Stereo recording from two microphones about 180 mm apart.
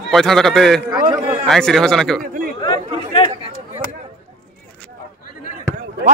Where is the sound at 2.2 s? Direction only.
50° right (ahead or behind).